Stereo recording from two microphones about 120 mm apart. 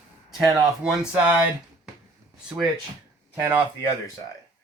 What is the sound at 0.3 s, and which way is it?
Speech, 5° right (ahead or behind).